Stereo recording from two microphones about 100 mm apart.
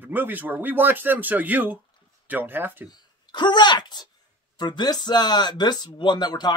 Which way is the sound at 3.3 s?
50° left (ahead or behind).